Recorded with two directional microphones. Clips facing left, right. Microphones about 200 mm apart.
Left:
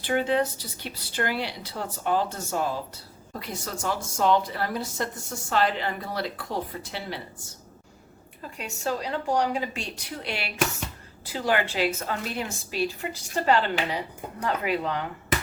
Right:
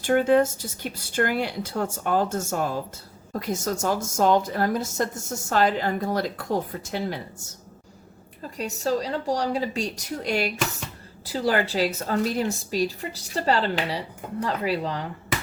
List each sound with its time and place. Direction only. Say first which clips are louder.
0.0 s a woman's voice: right 5 dB; 50° right (ahead or behind)
8.5 s a woman's voice: right 5 dB; 35° right (ahead or behind)